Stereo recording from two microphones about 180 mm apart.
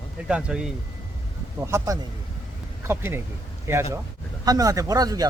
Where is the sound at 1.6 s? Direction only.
15° right (ahead or behind).